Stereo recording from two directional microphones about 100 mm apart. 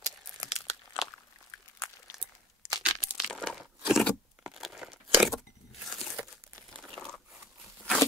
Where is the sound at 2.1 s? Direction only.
5° right (ahead or behind).